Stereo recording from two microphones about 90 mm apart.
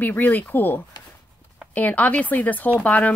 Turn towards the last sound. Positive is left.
turn(degrees=15)  # may be behind; listen again after turning